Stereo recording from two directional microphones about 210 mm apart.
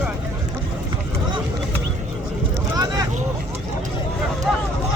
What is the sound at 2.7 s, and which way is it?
Vehicle, 15° right (ahead or behind).